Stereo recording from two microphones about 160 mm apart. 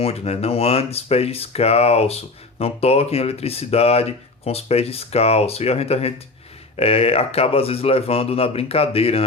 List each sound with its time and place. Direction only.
0.0 s speech: 40° left (ahead or behind)